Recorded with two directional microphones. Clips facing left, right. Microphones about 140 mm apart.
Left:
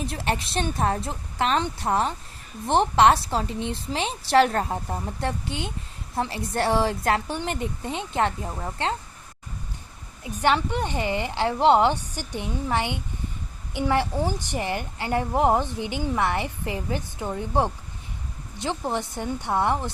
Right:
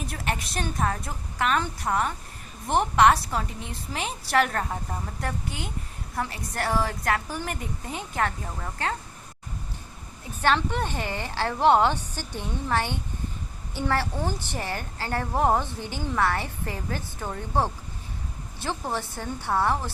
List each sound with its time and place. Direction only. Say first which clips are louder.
0.0 s a woman's voice: left 4 dB; 30° left (ahead or behind)
10.2 s a woman's voice: left 2 dB; 15° left (ahead or behind)